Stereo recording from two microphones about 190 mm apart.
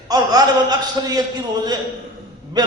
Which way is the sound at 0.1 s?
20° right (ahead or behind).